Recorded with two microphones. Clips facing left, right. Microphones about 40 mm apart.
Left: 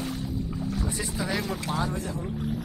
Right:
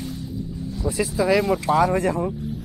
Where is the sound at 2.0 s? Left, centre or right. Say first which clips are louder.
Right 11 dB; right.